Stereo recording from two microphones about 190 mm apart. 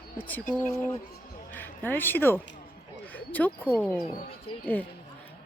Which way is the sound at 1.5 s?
10° left (ahead or behind).